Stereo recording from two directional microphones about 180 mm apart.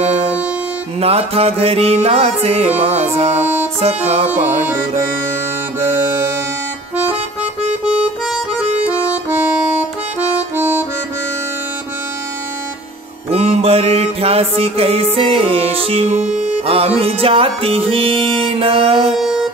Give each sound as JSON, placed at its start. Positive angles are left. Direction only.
{"t": 1.0, "sound": "music", "side_deg": -35}
{"t": 3.3, "sound": "music", "side_deg": -10}
{"t": 3.8, "sound": "music", "side_deg": -35}
{"t": 7.8, "sound": "harmonica", "side_deg": -5}
{"t": 8.7, "sound": "accordion", "side_deg": -5}
{"t": 10.3, "sound": "music", "side_deg": -10}
{"t": 13.3, "sound": "music", "side_deg": -35}
{"t": 19.1, "sound": "music", "side_deg": 0}